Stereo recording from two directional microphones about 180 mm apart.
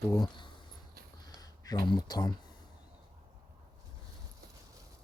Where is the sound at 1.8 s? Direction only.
20° left (ahead or behind).